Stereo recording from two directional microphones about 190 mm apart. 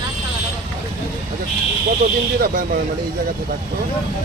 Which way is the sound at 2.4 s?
50° right (ahead or behind).